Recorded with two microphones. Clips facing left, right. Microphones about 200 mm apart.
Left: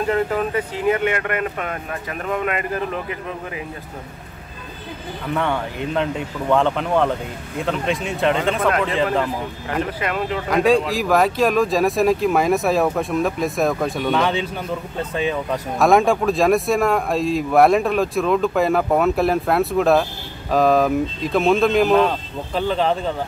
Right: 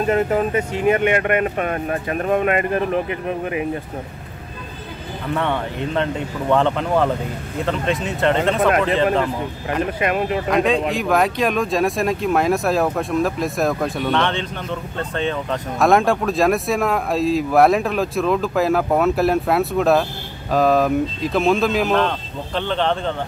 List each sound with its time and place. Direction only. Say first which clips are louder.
0.0 s speech: right 2 dB; 25° right (ahead or behind)
5.3 s speech: even; centre (ahead or behind)
8.5 s speech: right 3 dB; 20° right (ahead or behind)
9.9 s speech: right 3 dB; 20° right (ahead or behind)
10.5 s speech: left 3 dB; centre (ahead or behind)